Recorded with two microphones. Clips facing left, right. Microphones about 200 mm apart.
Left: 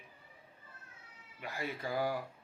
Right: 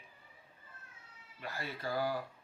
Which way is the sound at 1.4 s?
15° left (ahead or behind).